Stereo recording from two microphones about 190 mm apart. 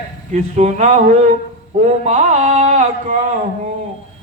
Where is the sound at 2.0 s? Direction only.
40° right (ahead or behind).